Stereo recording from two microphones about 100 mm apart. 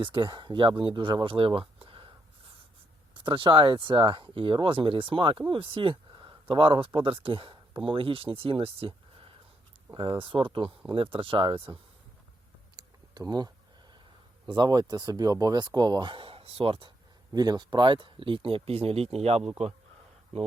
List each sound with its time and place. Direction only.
0.0 s speech: 50° right (ahead or behind)
3.2 s speech: 55° right (ahead or behind)
9.9 s speech: 55° right (ahead or behind)
12.7 s typing: 45° right (ahead or behind)
14.4 s speech: 50° right (ahead or behind)
17.3 s speech: 40° right (ahead or behind); by 19.5 s 90° right